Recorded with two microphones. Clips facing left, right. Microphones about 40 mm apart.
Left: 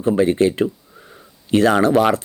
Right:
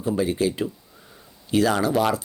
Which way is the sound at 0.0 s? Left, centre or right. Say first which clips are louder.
Left 7 dB; left.